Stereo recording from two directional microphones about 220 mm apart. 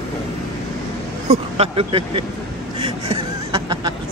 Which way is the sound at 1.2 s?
30° right (ahead or behind).